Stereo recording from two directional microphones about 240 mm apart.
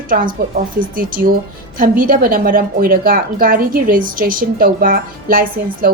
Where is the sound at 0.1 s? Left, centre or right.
Right.